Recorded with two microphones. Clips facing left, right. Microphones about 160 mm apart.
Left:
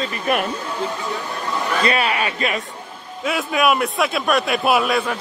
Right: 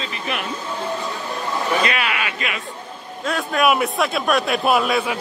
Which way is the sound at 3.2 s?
5° left (ahead or behind).